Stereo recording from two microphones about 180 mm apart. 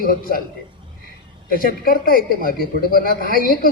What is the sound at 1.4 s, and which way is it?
A woman's voice, 55° left (ahead or behind).